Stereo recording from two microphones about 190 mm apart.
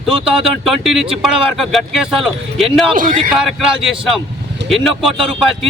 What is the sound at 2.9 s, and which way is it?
Speech, 45° right (ahead or behind).